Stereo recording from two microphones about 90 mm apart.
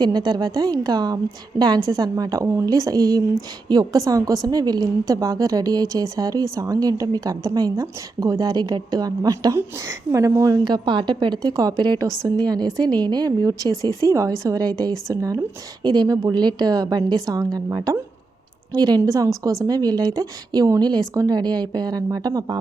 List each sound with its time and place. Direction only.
0.0 s a woman's voice: 50° right (ahead or behind)
9.6 s a woman's voice: 30° right (ahead or behind)
10.6 s a woman's voice: 60° right (ahead or behind); by 15.4 s 40° right (ahead or behind)
15.8 s a woman's voice: 50° right (ahead or behind)